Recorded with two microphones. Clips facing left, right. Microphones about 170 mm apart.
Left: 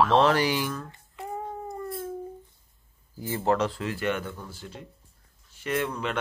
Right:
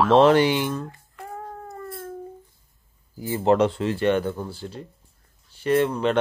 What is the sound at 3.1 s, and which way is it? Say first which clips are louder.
Speech: right 5 dB; 15° right (ahead or behind).